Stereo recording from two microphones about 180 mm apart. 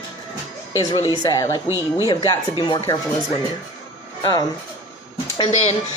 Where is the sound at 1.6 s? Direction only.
15° right (ahead or behind).